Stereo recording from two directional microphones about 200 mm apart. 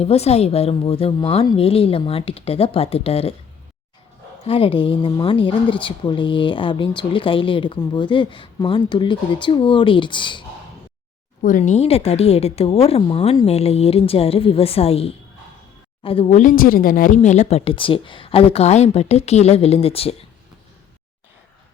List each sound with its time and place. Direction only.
0.0 s a woman's voice: 30° left (ahead or behind)
4.4 s a woman's voice: 25° left (ahead or behind)
11.4 s a woman's voice: 40° left (ahead or behind)